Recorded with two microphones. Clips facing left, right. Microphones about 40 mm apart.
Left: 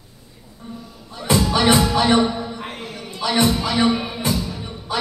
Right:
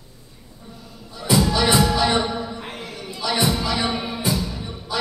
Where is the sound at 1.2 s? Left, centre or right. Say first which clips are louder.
Left 2 dB; left.